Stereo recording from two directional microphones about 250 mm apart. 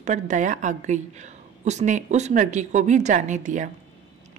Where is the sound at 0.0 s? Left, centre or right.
Right.